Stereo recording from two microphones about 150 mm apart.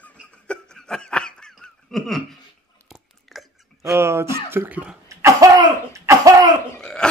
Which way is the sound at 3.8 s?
20° right (ahead or behind).